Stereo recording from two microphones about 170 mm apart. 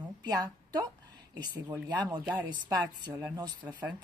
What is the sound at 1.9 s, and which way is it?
Speech, 25° right (ahead or behind).